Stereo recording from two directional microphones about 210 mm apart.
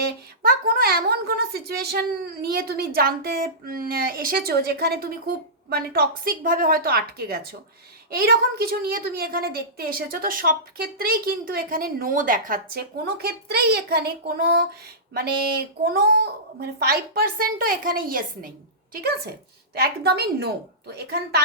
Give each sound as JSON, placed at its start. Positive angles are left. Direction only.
{"t": 0.4, "sound": "a woman's voice", "side_deg": -45}